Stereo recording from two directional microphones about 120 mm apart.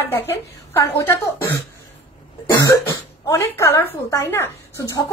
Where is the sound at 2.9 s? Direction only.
20° left (ahead or behind).